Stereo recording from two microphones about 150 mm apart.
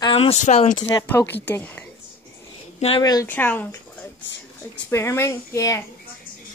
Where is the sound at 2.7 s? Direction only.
40° left (ahead or behind).